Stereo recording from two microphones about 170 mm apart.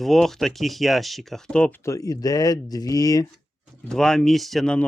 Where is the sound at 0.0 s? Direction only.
Centre (ahead or behind).